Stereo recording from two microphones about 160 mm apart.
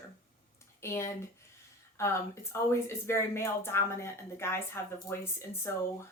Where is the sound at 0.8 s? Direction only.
15° left (ahead or behind).